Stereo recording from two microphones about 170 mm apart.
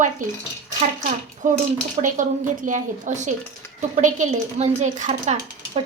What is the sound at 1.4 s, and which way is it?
A woman's voice, 45° right (ahead or behind).